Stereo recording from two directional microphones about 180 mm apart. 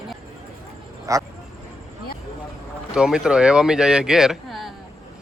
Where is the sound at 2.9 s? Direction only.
5° right (ahead or behind).